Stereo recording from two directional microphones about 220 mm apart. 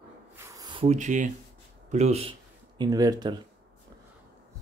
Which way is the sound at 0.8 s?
30° right (ahead or behind).